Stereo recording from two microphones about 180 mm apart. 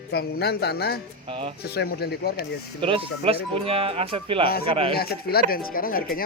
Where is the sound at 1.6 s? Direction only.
65° left (ahead or behind).